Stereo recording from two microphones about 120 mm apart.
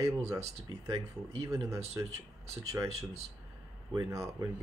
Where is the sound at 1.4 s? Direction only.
25° right (ahead or behind).